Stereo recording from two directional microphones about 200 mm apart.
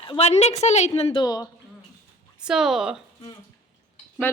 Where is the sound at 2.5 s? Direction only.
Centre (ahead or behind).